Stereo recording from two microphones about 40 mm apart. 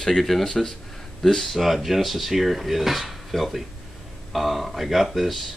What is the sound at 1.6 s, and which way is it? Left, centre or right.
Speech, centre.